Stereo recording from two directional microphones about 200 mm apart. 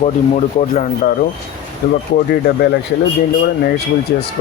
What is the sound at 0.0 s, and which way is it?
A man's voice, 35° left (ahead or behind).